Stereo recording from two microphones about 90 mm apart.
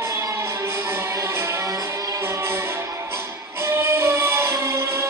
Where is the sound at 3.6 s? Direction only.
30° right (ahead or behind).